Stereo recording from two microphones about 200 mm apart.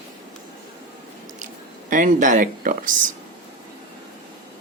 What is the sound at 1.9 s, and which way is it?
Speech, 40° right (ahead or behind).